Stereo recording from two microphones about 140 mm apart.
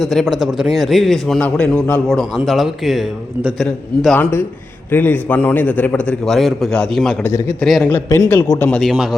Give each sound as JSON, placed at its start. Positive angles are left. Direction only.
{"t": 0.0, "sound": "a man's voice", "side_deg": 0}
{"t": 4.2, "sound": "a man's voice", "side_deg": 15}
{"t": 7.2, "sound": "a man's voice", "side_deg": 15}
{"t": 7.6, "sound": "a man's voice", "side_deg": 5}
{"t": 8.8, "sound": "a man's voice", "side_deg": 0}